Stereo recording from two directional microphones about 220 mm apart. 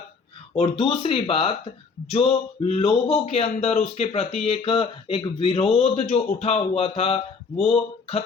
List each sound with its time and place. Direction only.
0.5 s speech: 25° left (ahead or behind)